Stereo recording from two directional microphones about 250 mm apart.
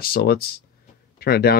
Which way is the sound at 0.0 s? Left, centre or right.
Left.